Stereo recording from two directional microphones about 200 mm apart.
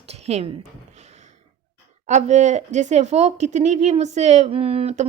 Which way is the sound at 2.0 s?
35° right (ahead or behind).